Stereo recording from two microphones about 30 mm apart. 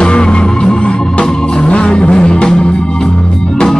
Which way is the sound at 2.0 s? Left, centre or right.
Left.